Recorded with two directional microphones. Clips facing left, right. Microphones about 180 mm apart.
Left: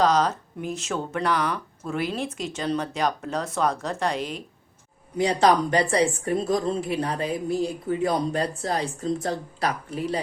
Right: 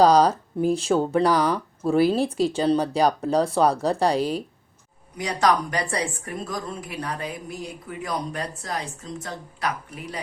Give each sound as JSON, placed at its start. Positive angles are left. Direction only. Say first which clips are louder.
{"t": 0.0, "sound": "speech", "louder": "right 5 dB", "side_deg": -35}
{"t": 5.1, "sound": "speech", "louder": "left 2 dB", "side_deg": 25}